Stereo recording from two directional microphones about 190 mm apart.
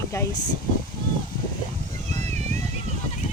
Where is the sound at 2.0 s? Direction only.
35° right (ahead or behind).